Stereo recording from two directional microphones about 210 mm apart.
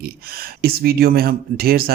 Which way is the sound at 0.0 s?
45° right (ahead or behind).